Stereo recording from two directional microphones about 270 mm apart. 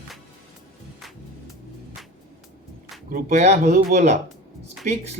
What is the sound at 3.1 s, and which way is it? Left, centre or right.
Speech, right.